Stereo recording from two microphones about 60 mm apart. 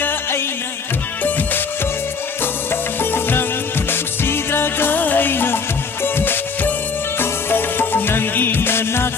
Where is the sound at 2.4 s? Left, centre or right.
Left.